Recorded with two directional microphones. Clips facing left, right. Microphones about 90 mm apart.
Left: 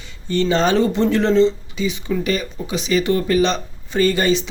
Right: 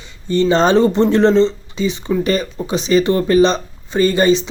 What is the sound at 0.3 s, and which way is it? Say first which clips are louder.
Speech: right 4 dB; 20° right (ahead or behind).